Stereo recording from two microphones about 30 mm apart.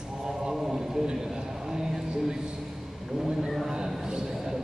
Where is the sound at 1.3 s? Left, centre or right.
Right.